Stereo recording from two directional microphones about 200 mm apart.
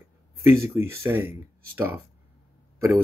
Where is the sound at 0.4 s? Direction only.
10° right (ahead or behind).